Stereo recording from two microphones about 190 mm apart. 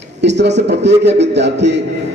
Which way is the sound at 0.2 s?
65° right (ahead or behind).